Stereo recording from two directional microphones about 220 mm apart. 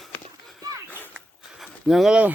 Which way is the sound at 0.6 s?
15° right (ahead or behind).